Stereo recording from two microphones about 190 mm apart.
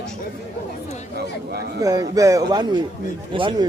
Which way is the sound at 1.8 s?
20° right (ahead or behind).